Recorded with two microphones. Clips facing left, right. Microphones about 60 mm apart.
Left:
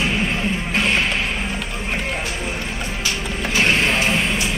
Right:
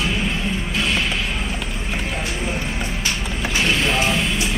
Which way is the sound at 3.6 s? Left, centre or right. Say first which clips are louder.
Left 1 dB; left.